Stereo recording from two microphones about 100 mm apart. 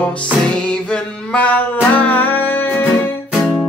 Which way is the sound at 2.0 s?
15° left (ahead or behind).